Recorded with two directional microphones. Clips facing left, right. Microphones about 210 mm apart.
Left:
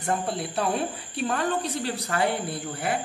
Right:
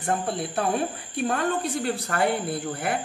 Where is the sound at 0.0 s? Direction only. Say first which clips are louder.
Right 1 dB; 55° right (ahead or behind).